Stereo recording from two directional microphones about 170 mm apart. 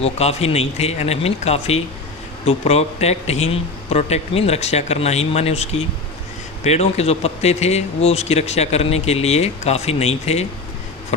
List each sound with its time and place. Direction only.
0.0 s speech: 40° left (ahead or behind)